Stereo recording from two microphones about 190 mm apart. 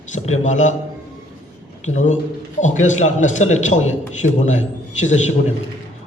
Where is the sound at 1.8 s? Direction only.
40° left (ahead or behind).